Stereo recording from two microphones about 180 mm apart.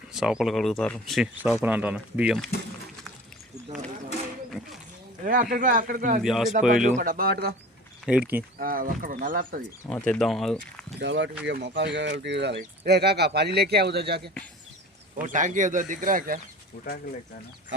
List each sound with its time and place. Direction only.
0.1 s speech: 5° right (ahead or behind)
4.6 s speech: 5° right (ahead or behind)
5.2 s speech: 50° right (ahead or behind)
6.2 s speech: centre (ahead or behind)
6.8 s speech: 50° right (ahead or behind)
8.0 s speech: 10° right (ahead or behind)
8.5 s speech: 50° right (ahead or behind)
9.9 s speech: 5° left (ahead or behind)
11.0 s speech: 80° right
15.3 s speech: 45° right (ahead or behind)